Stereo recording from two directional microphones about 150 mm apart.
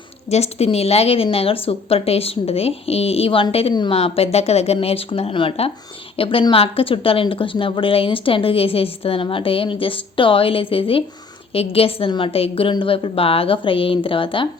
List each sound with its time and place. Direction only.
0.3 s a woman's voice: 45° left (ahead or behind)